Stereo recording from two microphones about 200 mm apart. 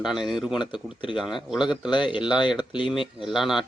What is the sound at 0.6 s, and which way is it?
Speech, 25° left (ahead or behind).